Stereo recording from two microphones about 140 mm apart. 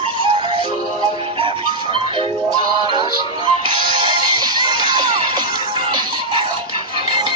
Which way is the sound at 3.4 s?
35° right (ahead or behind).